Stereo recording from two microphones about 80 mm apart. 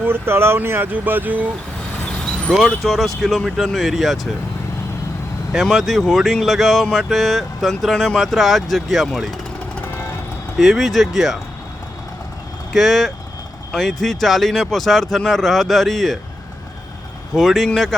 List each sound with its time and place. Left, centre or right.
0.0 s speech: right
2.5 s speech: centre
5.6 s speech: centre
10.6 s speech: centre
12.7 s speech: centre
17.3 s speech: centre